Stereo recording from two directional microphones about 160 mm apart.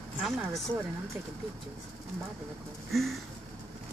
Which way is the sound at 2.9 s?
Centre (ahead or behind).